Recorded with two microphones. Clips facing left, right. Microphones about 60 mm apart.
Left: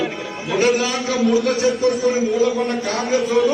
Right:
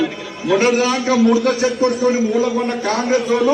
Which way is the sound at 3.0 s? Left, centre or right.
Right.